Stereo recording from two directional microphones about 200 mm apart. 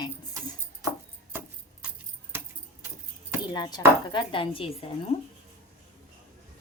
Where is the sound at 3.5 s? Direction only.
20° left (ahead or behind).